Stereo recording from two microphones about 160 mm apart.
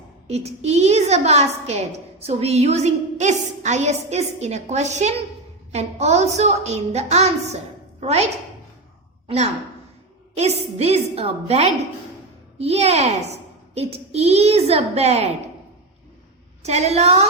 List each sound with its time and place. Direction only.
0.3 s a woman's voice: 40° right (ahead or behind)
16.6 s a woman's voice: 45° right (ahead or behind)